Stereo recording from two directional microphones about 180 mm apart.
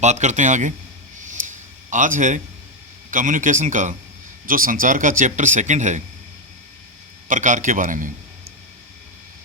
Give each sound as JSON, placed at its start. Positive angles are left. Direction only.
{"t": 0.0, "sound": "a man's voice", "side_deg": -40}
{"t": 1.2, "sound": "a sound", "side_deg": -45}
{"t": 3.1, "sound": "speech", "side_deg": -45}
{"t": 7.3, "sound": "speech", "side_deg": -45}